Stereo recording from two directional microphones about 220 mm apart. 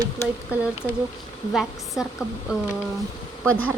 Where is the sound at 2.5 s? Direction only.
5° right (ahead or behind).